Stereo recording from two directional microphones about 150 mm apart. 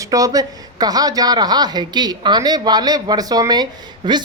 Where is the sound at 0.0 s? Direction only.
25° right (ahead or behind).